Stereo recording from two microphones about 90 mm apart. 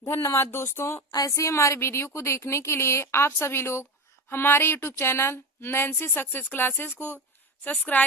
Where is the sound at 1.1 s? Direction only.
40° left (ahead or behind).